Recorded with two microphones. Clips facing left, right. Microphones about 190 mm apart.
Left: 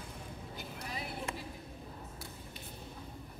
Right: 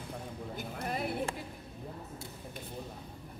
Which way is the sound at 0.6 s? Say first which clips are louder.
Right 8 dB; 55° right (ahead or behind).